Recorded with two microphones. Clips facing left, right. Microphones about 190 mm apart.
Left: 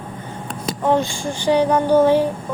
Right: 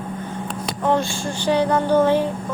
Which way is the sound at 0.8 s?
15° left (ahead or behind).